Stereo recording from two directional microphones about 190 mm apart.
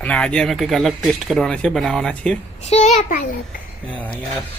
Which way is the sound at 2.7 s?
35° left (ahead or behind).